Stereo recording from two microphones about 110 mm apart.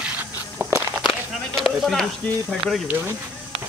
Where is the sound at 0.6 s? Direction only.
20° right (ahead or behind).